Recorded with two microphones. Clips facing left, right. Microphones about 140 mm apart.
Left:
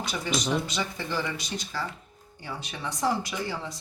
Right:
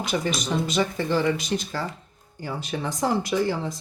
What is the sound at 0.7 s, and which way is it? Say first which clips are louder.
Speech: right 8 dB; 45° right (ahead or behind).